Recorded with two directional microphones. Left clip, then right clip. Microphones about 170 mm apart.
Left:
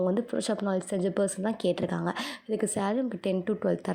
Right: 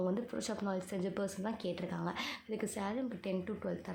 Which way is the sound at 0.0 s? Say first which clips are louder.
Left 9 dB; 30° left (ahead or behind).